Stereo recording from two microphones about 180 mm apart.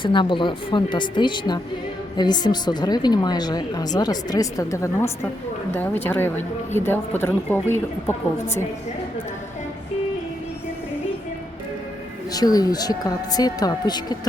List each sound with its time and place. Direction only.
0.0 s a woman's voice: 25° left (ahead or behind)
12.3 s speech: 20° left (ahead or behind)